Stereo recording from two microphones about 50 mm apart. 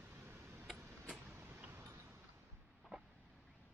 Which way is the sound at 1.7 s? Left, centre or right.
Right.